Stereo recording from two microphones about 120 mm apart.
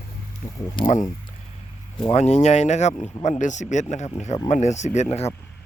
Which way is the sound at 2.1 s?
65° left (ahead or behind).